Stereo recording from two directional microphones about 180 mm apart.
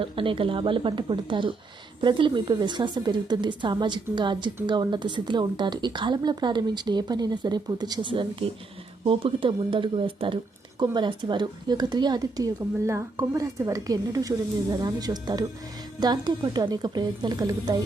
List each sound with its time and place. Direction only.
0.0 s a woman's voice: 30° right (ahead or behind)